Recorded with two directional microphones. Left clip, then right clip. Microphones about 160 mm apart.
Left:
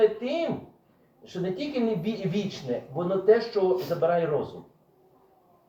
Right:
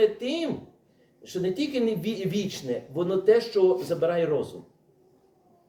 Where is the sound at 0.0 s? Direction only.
40° right (ahead or behind).